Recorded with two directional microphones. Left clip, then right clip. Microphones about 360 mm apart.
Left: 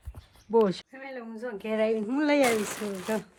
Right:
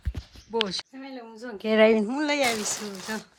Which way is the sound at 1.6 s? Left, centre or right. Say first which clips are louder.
Right 8 dB; right.